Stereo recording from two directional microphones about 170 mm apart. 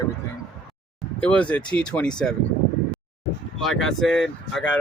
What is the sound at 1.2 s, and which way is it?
Speech, 5° left (ahead or behind).